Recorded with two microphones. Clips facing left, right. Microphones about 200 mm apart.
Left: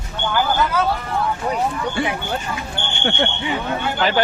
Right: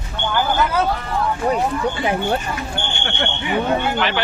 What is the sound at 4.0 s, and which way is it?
Speech, 40° left (ahead or behind).